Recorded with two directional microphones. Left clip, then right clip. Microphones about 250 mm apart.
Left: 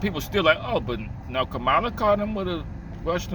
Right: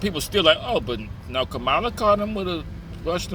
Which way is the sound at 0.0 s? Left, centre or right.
Centre.